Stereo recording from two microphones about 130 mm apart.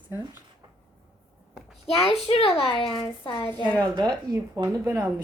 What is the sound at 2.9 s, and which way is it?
Speech, 35° left (ahead or behind).